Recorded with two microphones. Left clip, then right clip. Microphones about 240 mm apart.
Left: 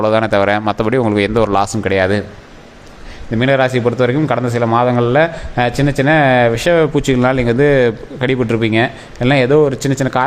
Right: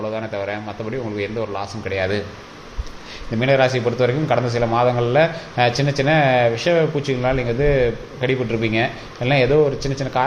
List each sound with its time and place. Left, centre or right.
0.0 s a man's voice: left
3.4 s a man's voice: left